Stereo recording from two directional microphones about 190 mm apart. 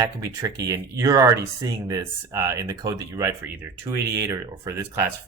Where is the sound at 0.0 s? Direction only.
15° right (ahead or behind).